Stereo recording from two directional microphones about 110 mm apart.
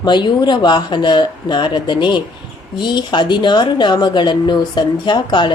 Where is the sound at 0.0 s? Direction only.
40° left (ahead or behind).